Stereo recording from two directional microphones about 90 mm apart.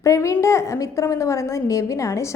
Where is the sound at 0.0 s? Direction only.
35° left (ahead or behind).